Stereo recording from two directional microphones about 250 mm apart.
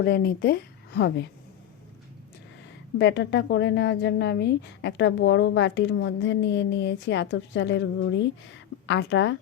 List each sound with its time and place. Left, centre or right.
0.0 s a woman's voice: left
3.0 s a woman's voice: left